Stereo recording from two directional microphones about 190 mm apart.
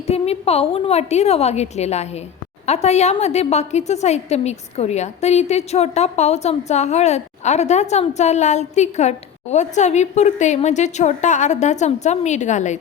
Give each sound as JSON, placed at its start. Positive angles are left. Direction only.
{"t": 0.1, "sound": "a woman's voice", "side_deg": 30}